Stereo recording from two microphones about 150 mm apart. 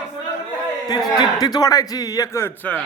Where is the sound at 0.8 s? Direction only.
25° left (ahead or behind).